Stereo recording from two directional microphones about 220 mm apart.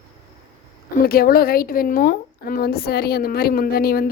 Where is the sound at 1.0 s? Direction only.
40° left (ahead or behind).